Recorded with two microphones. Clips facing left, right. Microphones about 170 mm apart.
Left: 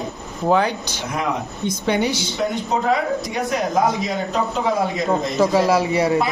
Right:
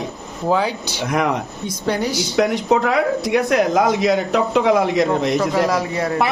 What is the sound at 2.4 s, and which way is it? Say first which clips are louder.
Speech: right 8 dB; 80° right.